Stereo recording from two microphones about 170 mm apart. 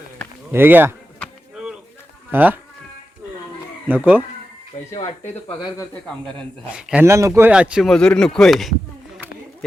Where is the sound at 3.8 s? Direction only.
10° right (ahead or behind).